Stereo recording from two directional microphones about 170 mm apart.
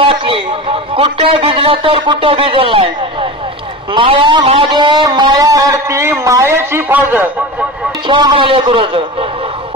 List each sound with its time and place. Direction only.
0.0 s a man's voice: 30° right (ahead or behind)
3.9 s guitar: 30° right (ahead or behind); by 7.2 s 10° right (ahead or behind)
8.1 s guitar: 30° right (ahead or behind)